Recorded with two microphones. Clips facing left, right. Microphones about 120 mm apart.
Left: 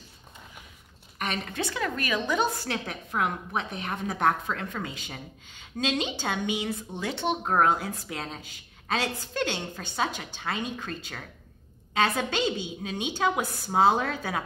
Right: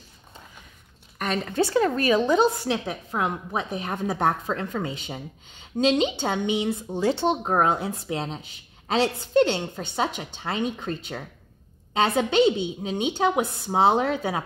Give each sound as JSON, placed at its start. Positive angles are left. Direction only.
{"t": 1.6, "sound": "a woman's voice", "side_deg": -35}
{"t": 7.4, "sound": "a woman's voice", "side_deg": -20}